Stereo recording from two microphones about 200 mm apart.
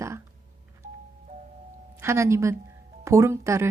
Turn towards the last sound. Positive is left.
turn(degrees=-15)  # may be behind; listen again after turning